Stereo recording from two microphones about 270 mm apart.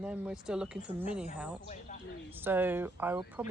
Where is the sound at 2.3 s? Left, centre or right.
Centre.